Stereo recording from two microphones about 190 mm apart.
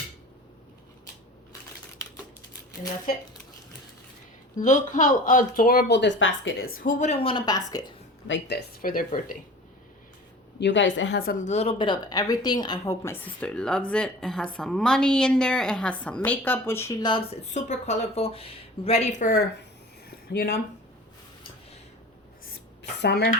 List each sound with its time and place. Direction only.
4.5 s speech: 40° left (ahead or behind); by 6.5 s 80° left
6.6 s a woman's voice: 50° left (ahead or behind); by 7.9 s 20° left (ahead or behind)
8.3 s speech: 60° left (ahead or behind)
10.6 s a woman's voice: 75° left (ahead or behind); by 19.6 s 50° left (ahead or behind)
20.1 s a sound: 55° left (ahead or behind)
22.4 s dishes: 65° left (ahead or behind)